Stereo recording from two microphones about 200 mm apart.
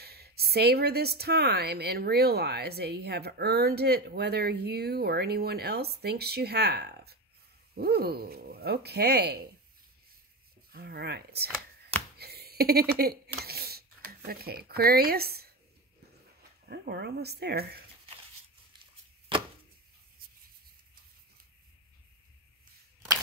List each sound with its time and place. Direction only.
0.0 s a woman's voice: 50° right (ahead or behind)
10.7 s a woman's voice: 50° right (ahead or behind)
12.2 s a sound: 50° right (ahead or behind)
16.6 s a woman's voice: 55° right (ahead or behind)